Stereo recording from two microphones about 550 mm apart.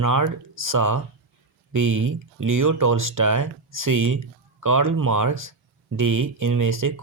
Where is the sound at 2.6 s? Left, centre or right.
Right.